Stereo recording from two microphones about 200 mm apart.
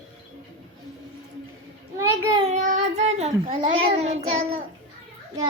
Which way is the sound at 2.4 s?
35° right (ahead or behind).